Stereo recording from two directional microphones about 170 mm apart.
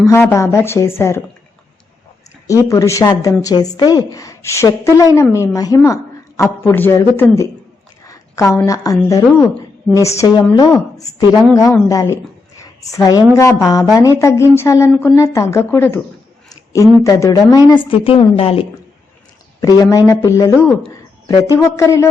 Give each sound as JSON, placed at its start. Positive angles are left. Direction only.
{"t": 0.0, "sound": "speech", "side_deg": 15}
{"t": 2.6, "sound": "a woman's voice", "side_deg": 20}
{"t": 8.0, "sound": "a sound", "side_deg": 20}
{"t": 9.0, "sound": "a woman's voice", "side_deg": 20}
{"t": 11.5, "sound": "a woman's voice", "side_deg": 20}
{"t": 12.1, "sound": "a sound", "side_deg": 20}
{"t": 13.3, "sound": "a woman's voice", "side_deg": 15}
{"t": 19.6, "sound": "a woman's voice", "side_deg": 20}